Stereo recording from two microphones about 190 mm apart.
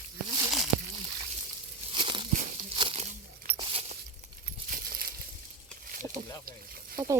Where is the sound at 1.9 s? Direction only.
25° right (ahead or behind).